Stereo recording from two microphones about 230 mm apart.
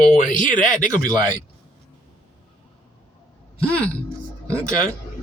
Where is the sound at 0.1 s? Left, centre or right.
Left.